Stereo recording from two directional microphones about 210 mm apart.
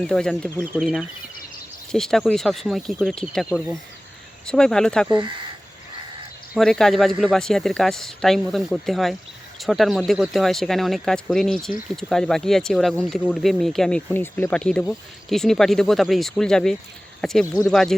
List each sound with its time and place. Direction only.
0.0 s speech: 5° left (ahead or behind)
5.0 s speech: 20° right (ahead or behind)
6.5 s speech: centre (ahead or behind)